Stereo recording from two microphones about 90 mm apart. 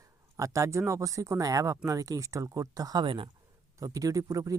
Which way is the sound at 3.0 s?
70° right (ahead or behind).